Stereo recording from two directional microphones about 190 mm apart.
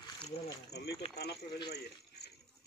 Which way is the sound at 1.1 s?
60° left (ahead or behind).